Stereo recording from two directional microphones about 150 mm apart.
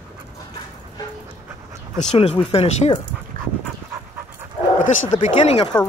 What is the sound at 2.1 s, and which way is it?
Speech, 45° left (ahead or behind).